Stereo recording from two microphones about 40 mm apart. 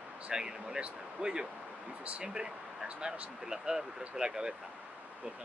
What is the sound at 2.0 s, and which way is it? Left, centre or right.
Speech, right.